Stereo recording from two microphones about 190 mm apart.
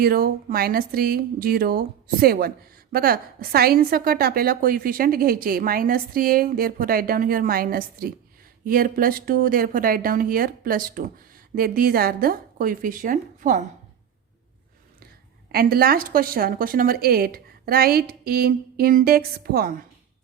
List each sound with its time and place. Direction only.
0.0 s a woman's voice: 50° right (ahead or behind)
15.5 s a woman's voice: 50° right (ahead or behind)